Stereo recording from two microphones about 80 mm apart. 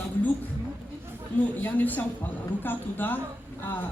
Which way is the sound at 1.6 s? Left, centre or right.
Left.